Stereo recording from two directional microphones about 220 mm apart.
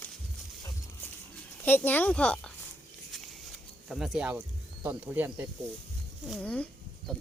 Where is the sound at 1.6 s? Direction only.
10° left (ahead or behind).